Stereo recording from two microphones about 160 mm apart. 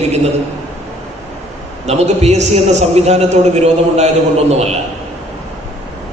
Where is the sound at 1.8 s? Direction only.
40° right (ahead or behind).